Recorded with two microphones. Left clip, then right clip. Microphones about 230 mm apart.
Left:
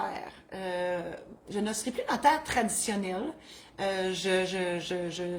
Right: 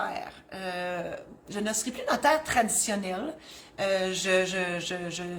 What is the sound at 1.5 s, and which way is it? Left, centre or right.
A woman's voice, centre.